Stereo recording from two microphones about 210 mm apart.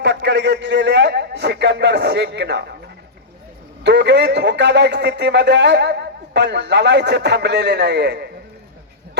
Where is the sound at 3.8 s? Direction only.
55° right (ahead or behind).